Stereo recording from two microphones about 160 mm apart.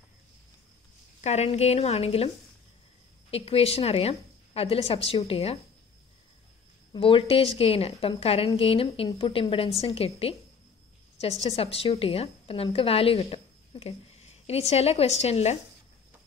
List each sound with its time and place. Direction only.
1.2 s a woman's voice: 45° left (ahead or behind)
6.9 s a woman's voice: 35° left (ahead or behind)
11.5 s a woman's voice: 40° left (ahead or behind)